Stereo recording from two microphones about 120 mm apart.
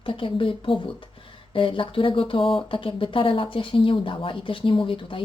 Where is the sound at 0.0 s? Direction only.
45° left (ahead or behind).